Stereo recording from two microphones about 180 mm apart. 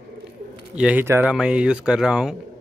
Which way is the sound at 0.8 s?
10° right (ahead or behind).